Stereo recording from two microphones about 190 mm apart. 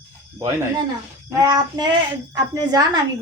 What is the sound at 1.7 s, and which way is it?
A child's voice, 20° right (ahead or behind).